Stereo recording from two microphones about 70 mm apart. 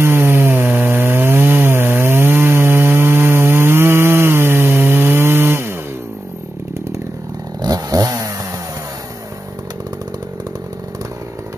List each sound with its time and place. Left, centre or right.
0.0 s chainsaw: right
7.6 s chainsaw: right